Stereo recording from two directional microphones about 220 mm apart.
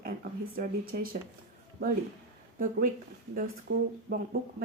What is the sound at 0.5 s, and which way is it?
Speech, 45° right (ahead or behind).